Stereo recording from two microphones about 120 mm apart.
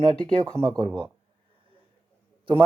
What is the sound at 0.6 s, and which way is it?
Speech, 40° right (ahead or behind).